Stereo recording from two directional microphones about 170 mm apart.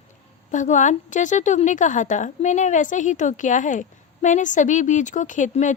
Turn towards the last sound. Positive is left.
turn(degrees=45)  # may be behind; listen again after turning